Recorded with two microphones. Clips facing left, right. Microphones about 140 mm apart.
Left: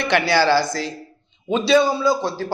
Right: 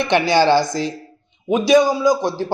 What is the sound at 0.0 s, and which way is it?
Speech, 20° right (ahead or behind).